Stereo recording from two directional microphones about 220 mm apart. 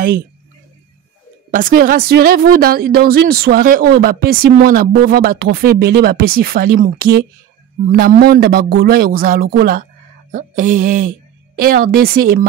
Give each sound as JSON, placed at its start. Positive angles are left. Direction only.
{"t": 1.5, "sound": "a woman's voice", "side_deg": -40}